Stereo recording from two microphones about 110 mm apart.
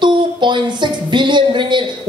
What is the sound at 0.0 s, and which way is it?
Speech, 45° right (ahead or behind).